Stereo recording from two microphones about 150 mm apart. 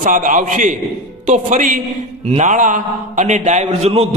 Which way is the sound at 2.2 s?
50° right (ahead or behind).